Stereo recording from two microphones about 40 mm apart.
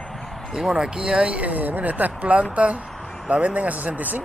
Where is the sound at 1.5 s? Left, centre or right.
Right.